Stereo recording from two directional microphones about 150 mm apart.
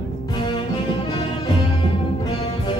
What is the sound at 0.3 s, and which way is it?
Music, 35° left (ahead or behind).